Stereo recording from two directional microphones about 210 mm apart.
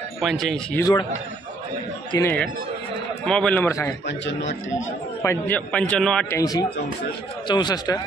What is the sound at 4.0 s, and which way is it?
Speech, 60° left (ahead or behind).